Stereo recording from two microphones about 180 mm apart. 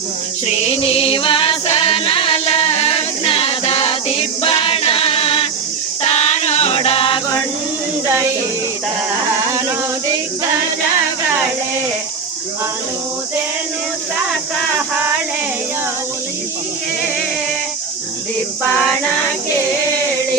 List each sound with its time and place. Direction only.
0.4 s music: 35° left (ahead or behind)
4.4 s choir: 30° left (ahead or behind)
6.0 s music: 40° left (ahead or behind)
8.0 s music: 15° right (ahead or behind)